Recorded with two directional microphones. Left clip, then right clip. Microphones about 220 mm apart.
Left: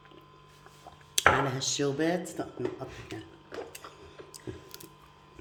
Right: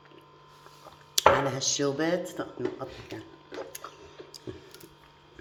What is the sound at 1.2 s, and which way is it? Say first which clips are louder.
Speech: right 2 dB; 10° left (ahead or behind).